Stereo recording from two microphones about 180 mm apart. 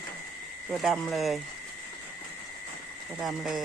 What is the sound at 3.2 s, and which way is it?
Speech, centre (ahead or behind).